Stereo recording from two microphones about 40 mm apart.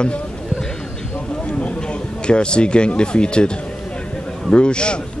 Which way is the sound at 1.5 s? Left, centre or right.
Left.